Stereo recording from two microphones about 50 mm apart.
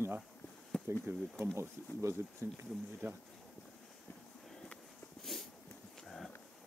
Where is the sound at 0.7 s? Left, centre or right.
Centre.